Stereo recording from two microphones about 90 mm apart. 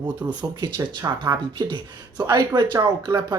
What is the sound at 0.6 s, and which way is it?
Speech, 55° right (ahead or behind).